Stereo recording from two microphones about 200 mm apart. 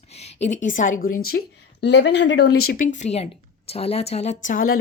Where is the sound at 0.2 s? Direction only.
35° left (ahead or behind).